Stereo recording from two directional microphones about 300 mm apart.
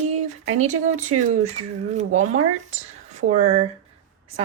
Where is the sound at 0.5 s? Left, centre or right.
Right.